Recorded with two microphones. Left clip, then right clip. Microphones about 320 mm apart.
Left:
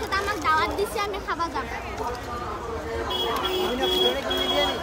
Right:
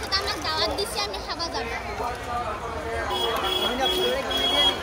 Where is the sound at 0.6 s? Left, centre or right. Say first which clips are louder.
Left 1 dB; centre.